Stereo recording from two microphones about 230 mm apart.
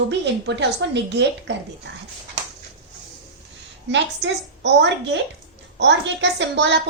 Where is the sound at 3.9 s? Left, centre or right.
Right.